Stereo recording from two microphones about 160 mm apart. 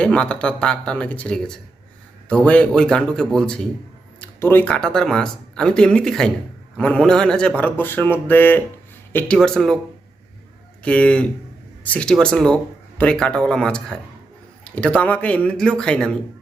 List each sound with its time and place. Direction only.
0.0 s speech: 5° left (ahead or behind)
10.8 s speech: 10° left (ahead or behind)